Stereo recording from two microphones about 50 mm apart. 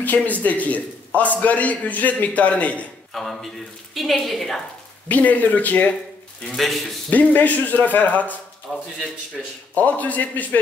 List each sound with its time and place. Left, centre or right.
0.0 s a man's voice: left
3.1 s a woman's voice: centre
5.0 s a man's voice: left
6.5 s a woman's voice: centre
7.1 s a man's voice: left
8.7 s a woman's voice: centre
9.8 s a man's voice: left